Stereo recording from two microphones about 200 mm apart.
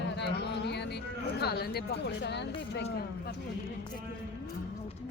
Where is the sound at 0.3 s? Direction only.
55° left (ahead or behind).